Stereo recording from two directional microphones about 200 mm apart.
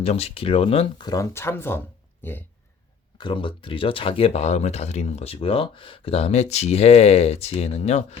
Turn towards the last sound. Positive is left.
turn(degrees=35)  # may be behind; listen again after turning